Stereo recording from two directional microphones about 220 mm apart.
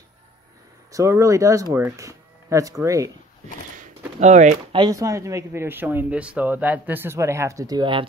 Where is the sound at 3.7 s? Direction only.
35° right (ahead or behind).